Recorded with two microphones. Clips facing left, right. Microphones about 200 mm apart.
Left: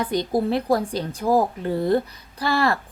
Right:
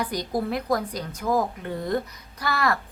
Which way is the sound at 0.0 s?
25° left (ahead or behind).